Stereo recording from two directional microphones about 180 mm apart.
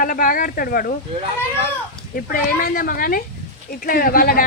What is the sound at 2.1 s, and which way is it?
Speech, 50° left (ahead or behind).